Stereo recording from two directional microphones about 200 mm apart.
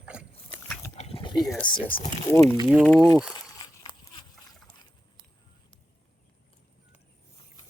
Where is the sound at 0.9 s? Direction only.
30° left (ahead or behind).